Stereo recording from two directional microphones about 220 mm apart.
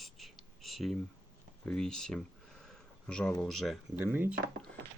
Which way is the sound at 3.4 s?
Centre (ahead or behind).